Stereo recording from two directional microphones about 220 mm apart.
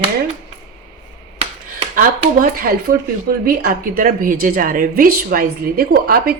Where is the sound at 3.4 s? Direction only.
40° right (ahead or behind).